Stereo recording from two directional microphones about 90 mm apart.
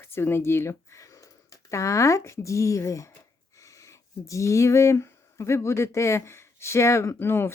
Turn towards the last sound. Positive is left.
turn(degrees=25)  # may be behind; listen again after turning